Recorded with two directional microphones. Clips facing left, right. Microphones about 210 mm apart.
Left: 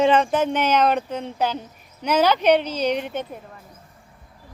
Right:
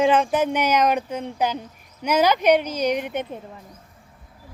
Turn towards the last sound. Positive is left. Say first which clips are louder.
# even
turn(degrees=-20)  # may be behind; listen again after turning